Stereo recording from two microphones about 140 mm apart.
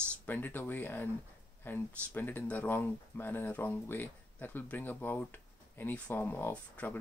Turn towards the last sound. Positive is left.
turn(degrees=10)  # may be behind; listen again after turning